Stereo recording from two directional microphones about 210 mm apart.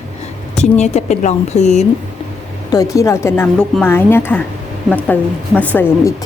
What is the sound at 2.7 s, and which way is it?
A woman's voice, 15° left (ahead or behind).